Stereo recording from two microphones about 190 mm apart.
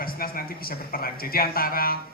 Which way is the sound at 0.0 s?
50° left (ahead or behind).